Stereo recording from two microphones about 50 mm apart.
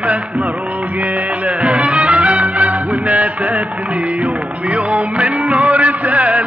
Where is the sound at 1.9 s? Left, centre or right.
Right.